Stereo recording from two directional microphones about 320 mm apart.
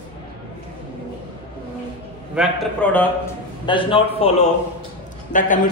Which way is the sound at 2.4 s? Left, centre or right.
Centre.